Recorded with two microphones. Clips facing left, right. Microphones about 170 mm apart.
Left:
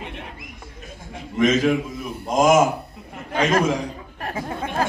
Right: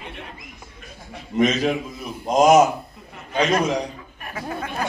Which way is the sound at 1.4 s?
50° left (ahead or behind).